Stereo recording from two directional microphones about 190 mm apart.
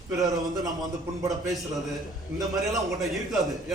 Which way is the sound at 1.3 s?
Centre (ahead or behind).